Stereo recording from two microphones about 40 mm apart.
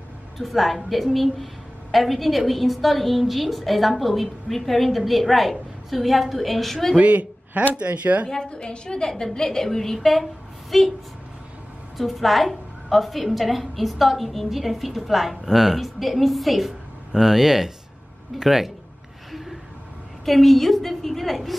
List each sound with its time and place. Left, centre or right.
0.4 s a woman's voice: centre
7.0 s speech: right
8.5 s a woman's voice: left; by 10.9 s centre
12.0 s a woman's voice: centre
20.2 s a woman's voice: centre